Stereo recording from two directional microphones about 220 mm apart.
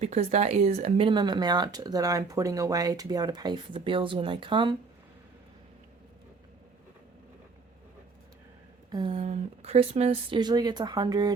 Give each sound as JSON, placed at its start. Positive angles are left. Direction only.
{"t": 0.0, "sound": "speech", "side_deg": -30}
{"t": 8.9, "sound": "speech", "side_deg": -20}